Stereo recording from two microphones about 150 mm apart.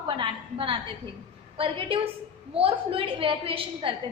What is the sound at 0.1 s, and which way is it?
A woman's voice, 35° right (ahead or behind).